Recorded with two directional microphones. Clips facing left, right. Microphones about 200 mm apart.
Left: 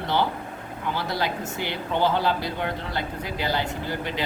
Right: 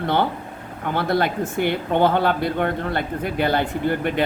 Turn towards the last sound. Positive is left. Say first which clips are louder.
# right 8 dB
turn(degrees=-55)  # may be behind; listen again after turning